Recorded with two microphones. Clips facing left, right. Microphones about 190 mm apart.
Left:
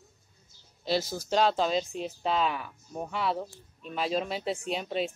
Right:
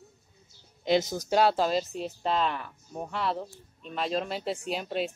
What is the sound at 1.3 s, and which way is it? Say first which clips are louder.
Speech: right 1 dB; 10° right (ahead or behind).